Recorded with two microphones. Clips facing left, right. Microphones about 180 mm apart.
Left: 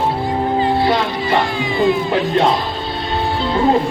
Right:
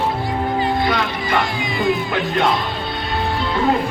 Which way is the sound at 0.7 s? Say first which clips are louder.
Left 4 dB; 30° left (ahead or behind).